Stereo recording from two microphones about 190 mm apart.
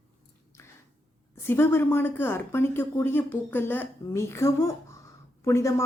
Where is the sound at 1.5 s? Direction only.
10° left (ahead or behind).